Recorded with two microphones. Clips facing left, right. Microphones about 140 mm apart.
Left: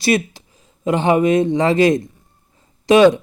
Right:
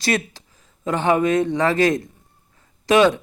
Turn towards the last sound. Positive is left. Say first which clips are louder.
# left 5 dB
turn(degrees=20)  # may be behind; listen again after turning